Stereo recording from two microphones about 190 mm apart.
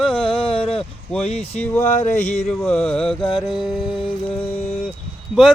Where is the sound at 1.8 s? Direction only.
40° left (ahead or behind).